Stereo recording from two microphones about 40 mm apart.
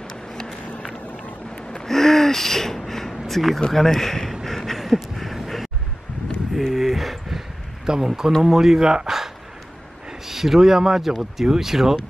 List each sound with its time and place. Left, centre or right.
0.1 s run: centre
1.9 s gasp: centre
3.7 s speech: centre
4.5 s a sound: centre
6.5 s a sound: centre
7.9 s speech: centre